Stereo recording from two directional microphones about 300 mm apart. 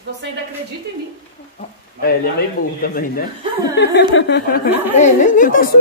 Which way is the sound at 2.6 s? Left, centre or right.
Left.